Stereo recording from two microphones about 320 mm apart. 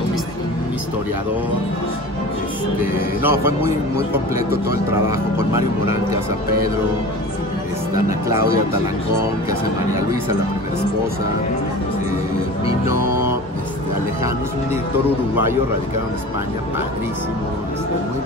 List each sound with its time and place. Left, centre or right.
3.2 s speech: centre
5.5 s speech: centre
13.0 s music: right